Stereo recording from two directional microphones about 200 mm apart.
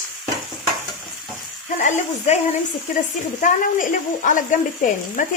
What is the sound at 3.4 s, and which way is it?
Speech, 40° left (ahead or behind).